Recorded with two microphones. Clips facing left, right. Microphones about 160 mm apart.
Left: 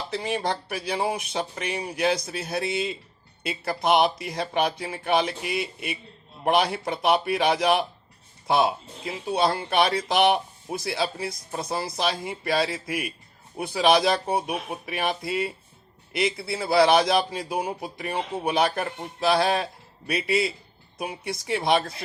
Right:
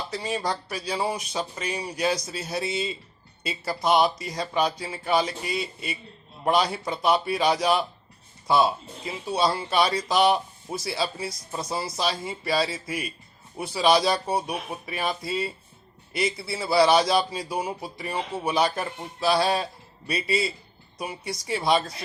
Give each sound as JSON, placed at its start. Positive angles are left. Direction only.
{"t": 0.1, "sound": "speech", "side_deg": 60}